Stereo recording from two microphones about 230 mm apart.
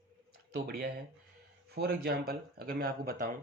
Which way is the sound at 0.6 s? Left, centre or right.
Right.